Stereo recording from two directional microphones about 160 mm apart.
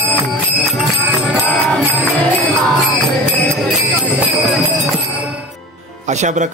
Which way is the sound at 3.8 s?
5° right (ahead or behind).